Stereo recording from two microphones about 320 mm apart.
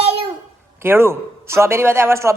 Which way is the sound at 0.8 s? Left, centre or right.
Centre.